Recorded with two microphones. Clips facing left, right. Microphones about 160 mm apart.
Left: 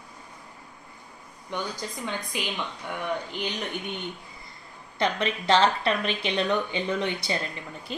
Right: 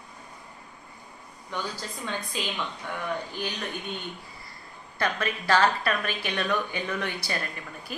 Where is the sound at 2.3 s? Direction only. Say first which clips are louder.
Even; 15° left (ahead or behind).